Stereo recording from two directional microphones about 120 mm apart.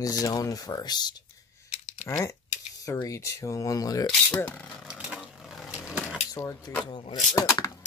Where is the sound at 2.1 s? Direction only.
25° left (ahead or behind).